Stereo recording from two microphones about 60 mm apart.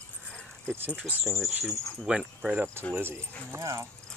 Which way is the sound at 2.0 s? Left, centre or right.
Centre.